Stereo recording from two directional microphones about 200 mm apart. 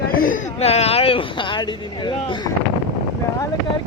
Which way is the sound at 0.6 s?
30° left (ahead or behind).